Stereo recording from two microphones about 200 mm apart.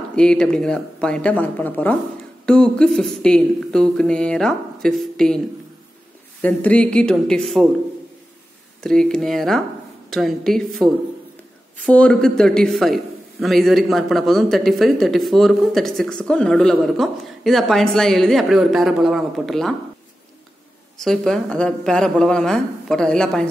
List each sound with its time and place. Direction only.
0.1 s a man's voice: 5° left (ahead or behind)
6.4 s a man's voice: 5° left (ahead or behind)
8.8 s a man's voice: 5° left (ahead or behind)
21.0 s a man's voice: centre (ahead or behind)